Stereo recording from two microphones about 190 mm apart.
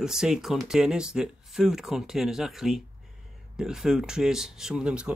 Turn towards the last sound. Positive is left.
turn(degrees=-5)  # may be behind; listen again after turning